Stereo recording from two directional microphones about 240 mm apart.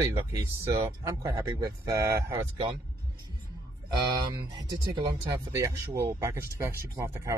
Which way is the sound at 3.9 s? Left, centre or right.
Centre.